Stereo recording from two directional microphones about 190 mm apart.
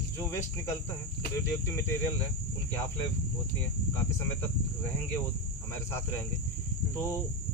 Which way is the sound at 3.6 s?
10° left (ahead or behind).